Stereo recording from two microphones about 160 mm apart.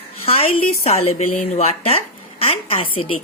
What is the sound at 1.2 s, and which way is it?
A woman's voice, 45° left (ahead or behind).